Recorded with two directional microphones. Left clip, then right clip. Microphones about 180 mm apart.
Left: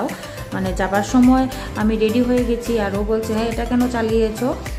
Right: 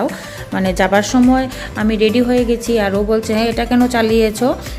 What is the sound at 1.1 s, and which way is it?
Speech, 5° right (ahead or behind).